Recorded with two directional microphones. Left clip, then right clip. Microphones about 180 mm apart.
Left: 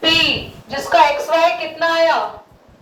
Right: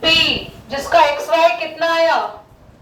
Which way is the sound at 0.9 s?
15° right (ahead or behind).